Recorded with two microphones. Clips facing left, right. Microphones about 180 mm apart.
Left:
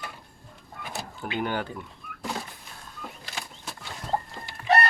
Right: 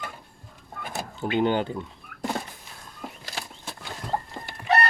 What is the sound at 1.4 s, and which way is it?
Speech, 20° right (ahead or behind).